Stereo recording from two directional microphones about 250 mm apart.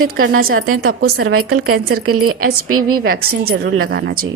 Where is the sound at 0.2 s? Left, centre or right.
Right.